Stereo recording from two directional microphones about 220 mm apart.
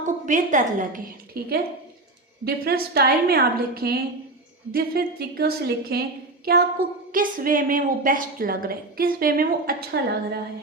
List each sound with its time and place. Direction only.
0.3 s a woman's voice: 35° right (ahead or behind)